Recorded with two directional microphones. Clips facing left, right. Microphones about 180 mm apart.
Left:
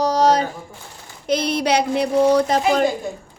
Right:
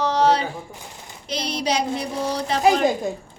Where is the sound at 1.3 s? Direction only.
55° left (ahead or behind).